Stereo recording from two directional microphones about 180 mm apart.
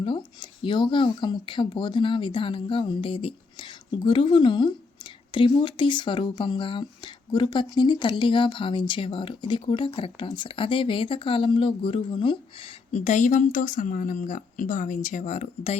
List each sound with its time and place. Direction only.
0.0 s speech: 30° left (ahead or behind)
12.9 s speech: 40° left (ahead or behind)